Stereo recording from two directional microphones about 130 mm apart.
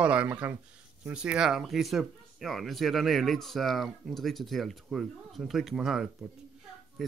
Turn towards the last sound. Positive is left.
turn(degrees=-5)  # may be behind; listen again after turning